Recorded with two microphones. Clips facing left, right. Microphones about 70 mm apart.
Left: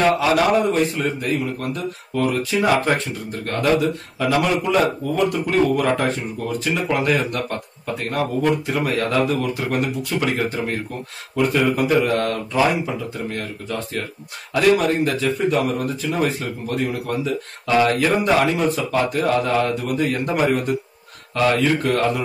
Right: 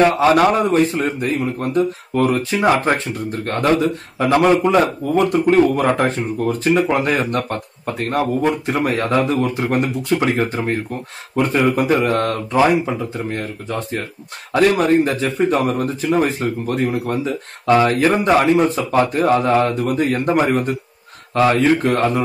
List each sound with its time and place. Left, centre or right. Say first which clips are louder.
0.2 s speech: right 3 dB; right